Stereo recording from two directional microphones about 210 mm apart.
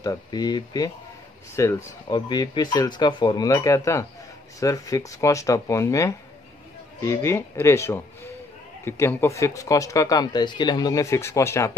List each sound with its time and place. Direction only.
0.0 s speech: 20° left (ahead or behind)